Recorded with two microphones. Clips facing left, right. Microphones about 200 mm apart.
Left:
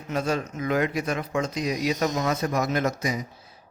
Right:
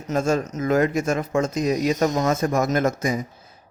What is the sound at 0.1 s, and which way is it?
Speech, 45° right (ahead or behind).